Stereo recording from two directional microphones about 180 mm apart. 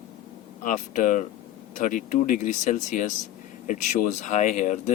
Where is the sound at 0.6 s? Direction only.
45° left (ahead or behind).